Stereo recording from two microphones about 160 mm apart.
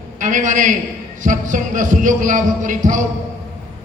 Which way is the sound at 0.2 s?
55° right (ahead or behind).